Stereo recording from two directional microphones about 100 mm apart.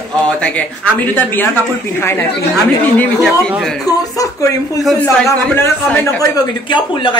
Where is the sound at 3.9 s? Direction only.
35° left (ahead or behind).